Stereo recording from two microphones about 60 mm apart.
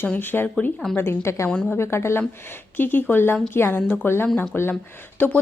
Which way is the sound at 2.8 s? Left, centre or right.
Left.